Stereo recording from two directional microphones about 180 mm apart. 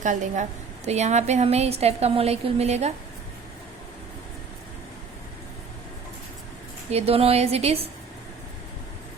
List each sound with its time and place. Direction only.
0.0 s a woman's voice: 45° right (ahead or behind)
6.9 s a woman's voice: 35° right (ahead or behind)